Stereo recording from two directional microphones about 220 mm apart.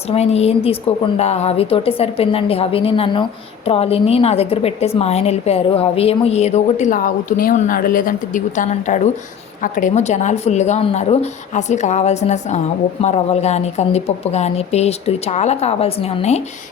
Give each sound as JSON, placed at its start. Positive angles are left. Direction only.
{"t": 0.1, "sound": "a woman's voice", "side_deg": 30}